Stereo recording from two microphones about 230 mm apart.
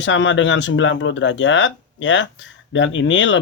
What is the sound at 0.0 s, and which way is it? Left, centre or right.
Speech, left.